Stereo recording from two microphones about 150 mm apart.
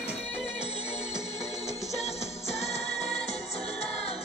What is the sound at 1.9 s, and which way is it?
Music, 45° left (ahead or behind).